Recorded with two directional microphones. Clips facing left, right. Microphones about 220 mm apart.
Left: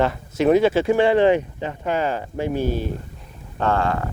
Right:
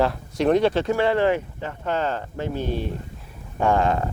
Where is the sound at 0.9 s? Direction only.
15° left (ahead or behind).